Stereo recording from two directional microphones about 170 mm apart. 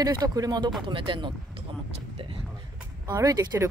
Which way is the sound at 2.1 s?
30° right (ahead or behind).